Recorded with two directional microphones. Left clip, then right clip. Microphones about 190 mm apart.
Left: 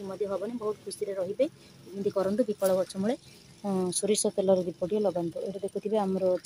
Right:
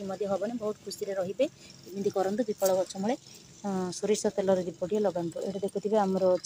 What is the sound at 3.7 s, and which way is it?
Speech, 10° left (ahead or behind).